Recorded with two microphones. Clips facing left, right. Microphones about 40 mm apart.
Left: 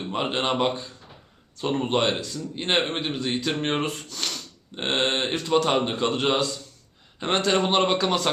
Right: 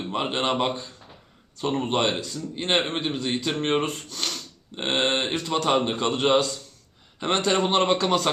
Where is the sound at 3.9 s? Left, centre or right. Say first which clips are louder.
Even; right.